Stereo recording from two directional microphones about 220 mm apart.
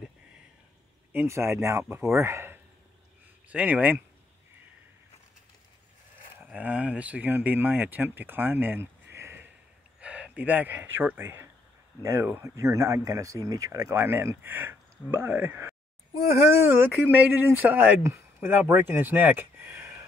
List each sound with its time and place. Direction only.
1.1 s speech: 10° right (ahead or behind)
6.4 s speech: 5° right (ahead or behind)